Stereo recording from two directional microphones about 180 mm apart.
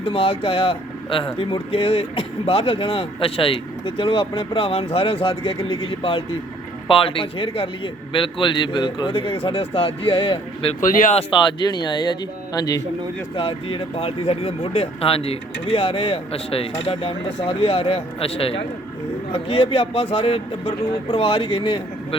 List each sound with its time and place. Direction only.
0.0 s a man's voice: 30° left (ahead or behind)
10.8 s a man's voice: 45° left (ahead or behind); by 21.8 s 30° left (ahead or behind)